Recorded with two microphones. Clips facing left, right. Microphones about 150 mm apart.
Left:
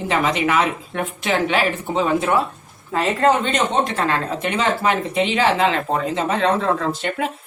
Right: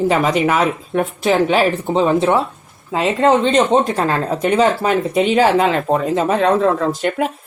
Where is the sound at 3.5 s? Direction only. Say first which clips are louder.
Right 6 dB; 35° right (ahead or behind).